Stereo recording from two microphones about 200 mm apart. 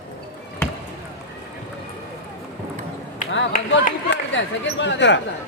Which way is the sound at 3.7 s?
65° left (ahead or behind).